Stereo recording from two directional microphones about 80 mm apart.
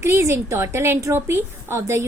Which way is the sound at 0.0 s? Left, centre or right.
Right.